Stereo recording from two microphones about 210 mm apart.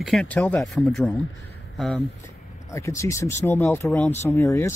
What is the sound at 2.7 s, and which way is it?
Speech, 15° left (ahead or behind).